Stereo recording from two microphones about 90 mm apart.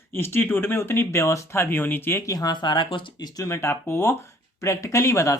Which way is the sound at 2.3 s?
45° left (ahead or behind).